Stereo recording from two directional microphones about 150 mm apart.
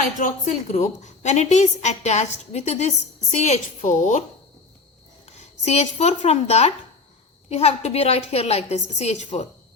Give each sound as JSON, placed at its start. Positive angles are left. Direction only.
{"t": 0.2, "sound": "a woman's voice", "side_deg": 55}
{"t": 5.2, "sound": "a woman's voice", "side_deg": 45}